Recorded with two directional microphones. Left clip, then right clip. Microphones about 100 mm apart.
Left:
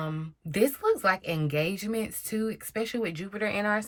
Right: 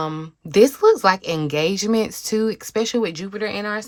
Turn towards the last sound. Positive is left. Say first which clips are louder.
# right 3 dB
turn(degrees=-15)  # may be behind; listen again after turning